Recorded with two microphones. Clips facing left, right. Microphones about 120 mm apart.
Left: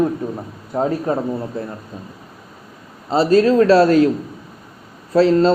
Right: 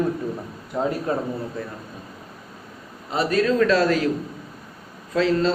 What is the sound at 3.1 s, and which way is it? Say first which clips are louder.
A man's voice: left 7 dB; 30° left (ahead or behind).